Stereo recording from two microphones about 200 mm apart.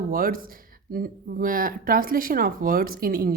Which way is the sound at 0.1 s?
45° right (ahead or behind).